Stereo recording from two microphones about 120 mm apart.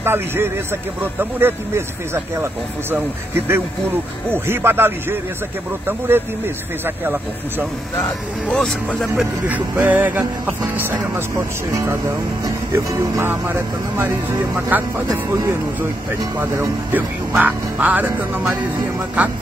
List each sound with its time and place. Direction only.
0.0 s speech: 20° right (ahead or behind)
4.3 s music: 20° right (ahead or behind)
8.5 s speech: 5° left (ahead or behind)
9.0 s music: 10° right (ahead or behind)
11.7 s speech: 25° right (ahead or behind)
14.7 s music: 15° right (ahead or behind)
16.3 s music: 20° right (ahead or behind)